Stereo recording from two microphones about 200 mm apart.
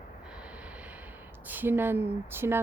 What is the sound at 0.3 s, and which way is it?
Vehicle, 5° right (ahead or behind).